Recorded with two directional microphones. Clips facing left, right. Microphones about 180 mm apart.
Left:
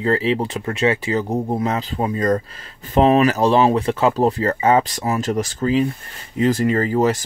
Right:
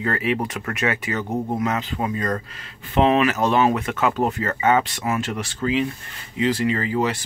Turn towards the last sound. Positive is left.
turn(degrees=40)  # may be behind; listen again after turning